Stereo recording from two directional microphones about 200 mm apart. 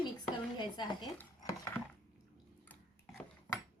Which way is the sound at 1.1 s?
15° left (ahead or behind).